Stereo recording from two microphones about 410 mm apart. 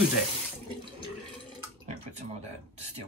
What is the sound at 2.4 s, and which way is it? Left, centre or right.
Speech, right.